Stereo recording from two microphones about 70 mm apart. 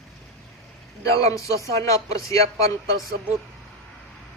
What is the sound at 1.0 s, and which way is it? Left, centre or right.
Speech, left.